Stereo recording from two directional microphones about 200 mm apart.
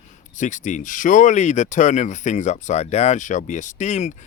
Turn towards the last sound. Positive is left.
turn(degrees=35)  # may be behind; listen again after turning